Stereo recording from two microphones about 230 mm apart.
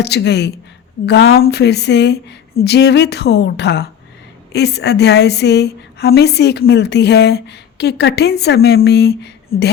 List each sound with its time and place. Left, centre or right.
0.0 s a woman's voice: left